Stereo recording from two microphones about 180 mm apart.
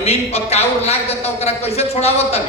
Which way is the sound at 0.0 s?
35° left (ahead or behind).